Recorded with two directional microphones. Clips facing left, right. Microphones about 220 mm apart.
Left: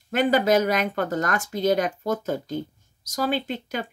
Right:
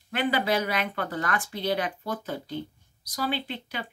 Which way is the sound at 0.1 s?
45° left (ahead or behind).